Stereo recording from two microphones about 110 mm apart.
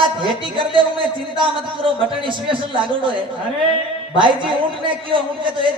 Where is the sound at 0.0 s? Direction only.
50° right (ahead or behind).